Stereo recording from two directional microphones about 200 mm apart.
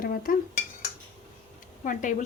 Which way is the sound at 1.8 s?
40° left (ahead or behind).